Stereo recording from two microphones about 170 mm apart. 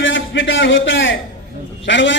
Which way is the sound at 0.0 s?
90° left.